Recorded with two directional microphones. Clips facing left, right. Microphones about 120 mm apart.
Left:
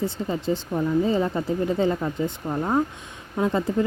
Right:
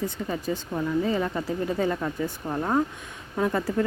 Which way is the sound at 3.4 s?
20° left (ahead or behind).